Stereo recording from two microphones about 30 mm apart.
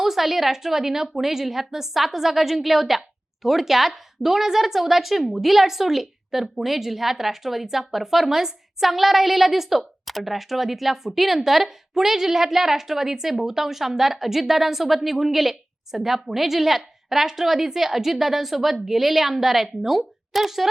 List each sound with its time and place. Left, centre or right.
0.0 s a woman's voice: centre
20.3 s a woman's voice: centre